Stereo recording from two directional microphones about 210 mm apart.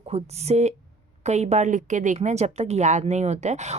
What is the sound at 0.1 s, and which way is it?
Speech, 30° right (ahead or behind).